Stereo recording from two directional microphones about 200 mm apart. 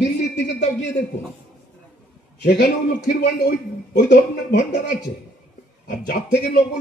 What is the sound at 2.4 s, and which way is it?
A man's voice, 50° left (ahead or behind).